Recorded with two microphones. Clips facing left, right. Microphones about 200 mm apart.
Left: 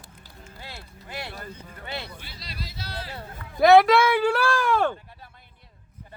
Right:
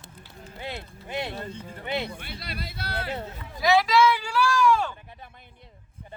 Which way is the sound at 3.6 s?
55° left (ahead or behind).